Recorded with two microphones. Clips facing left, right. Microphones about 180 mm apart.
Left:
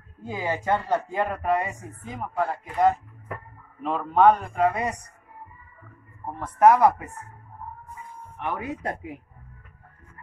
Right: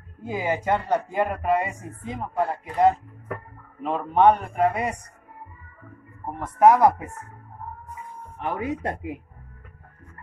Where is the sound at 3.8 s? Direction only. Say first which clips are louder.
Even; 15° right (ahead or behind).